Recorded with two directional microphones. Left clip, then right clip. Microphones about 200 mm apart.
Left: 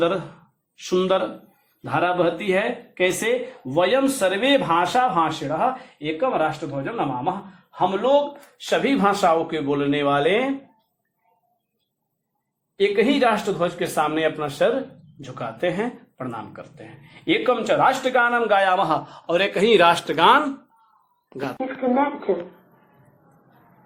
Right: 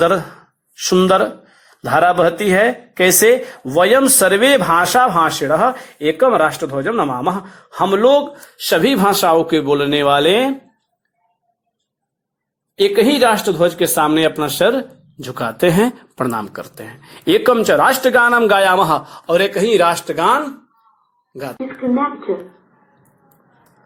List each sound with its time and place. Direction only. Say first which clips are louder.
0.9 s a man's voice: right 8 dB; 45° right (ahead or behind)
12.7 s speech: right 6 dB; 45° right (ahead or behind)
15.2 s a man's voice: right 9 dB; 50° right (ahead or behind); by 19.5 s 25° right (ahead or behind)
19.5 s speech: right 2 dB; 10° right (ahead or behind)